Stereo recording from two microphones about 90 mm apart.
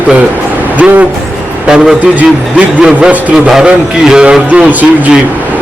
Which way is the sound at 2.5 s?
15° right (ahead or behind).